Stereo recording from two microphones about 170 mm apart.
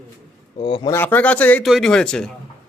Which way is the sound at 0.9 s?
10° left (ahead or behind).